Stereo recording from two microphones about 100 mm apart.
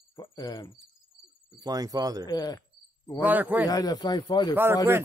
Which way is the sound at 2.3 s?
40° left (ahead or behind).